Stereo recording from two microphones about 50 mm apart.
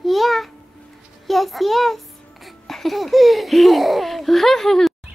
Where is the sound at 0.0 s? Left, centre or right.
Centre.